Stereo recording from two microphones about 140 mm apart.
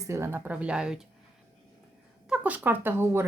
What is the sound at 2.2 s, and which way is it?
Speech, 10° right (ahead or behind).